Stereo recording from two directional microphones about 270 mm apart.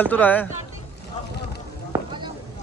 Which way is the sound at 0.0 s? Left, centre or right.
Centre.